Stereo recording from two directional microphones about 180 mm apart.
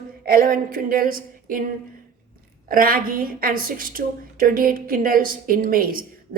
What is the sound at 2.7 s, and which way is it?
Speech, 55° right (ahead or behind).